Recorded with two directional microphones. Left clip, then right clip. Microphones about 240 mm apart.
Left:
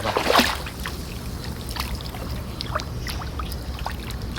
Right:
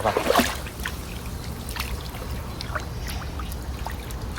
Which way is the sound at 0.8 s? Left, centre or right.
Left.